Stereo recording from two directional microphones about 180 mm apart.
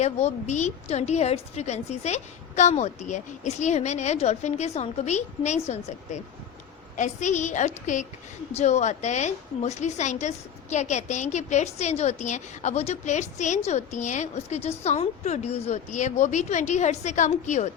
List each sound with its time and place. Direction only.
0.0 s a woman's voice: 40° left (ahead or behind)